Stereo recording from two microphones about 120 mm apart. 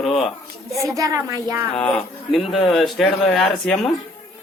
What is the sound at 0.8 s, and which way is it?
Speech, 30° right (ahead or behind).